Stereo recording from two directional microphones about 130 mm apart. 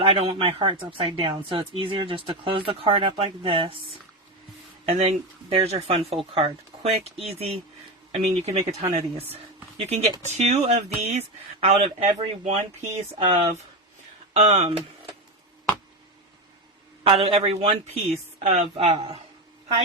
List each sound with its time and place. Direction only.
0.0 s speech: 50° right (ahead or behind)
4.9 s speech: 55° right (ahead or behind)
14.3 s speech: 55° right (ahead or behind)
17.0 s speech: 50° right (ahead or behind)
18.4 s speech: 65° right (ahead or behind)